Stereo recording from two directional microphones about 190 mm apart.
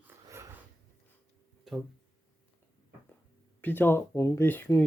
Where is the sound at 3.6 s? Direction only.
10° left (ahead or behind).